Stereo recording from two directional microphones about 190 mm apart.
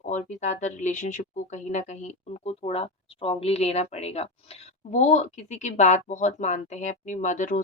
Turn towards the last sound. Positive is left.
turn(degrees=40)  # may be behind; listen again after turning